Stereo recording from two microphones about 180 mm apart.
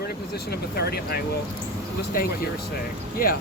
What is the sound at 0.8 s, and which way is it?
Speech, 65° left (ahead or behind).